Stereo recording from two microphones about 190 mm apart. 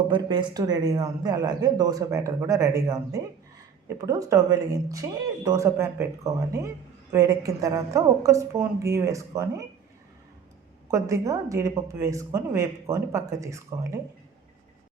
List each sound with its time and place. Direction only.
0.1 s a man's voice: 25° right (ahead or behind)
10.9 s speech: 15° right (ahead or behind)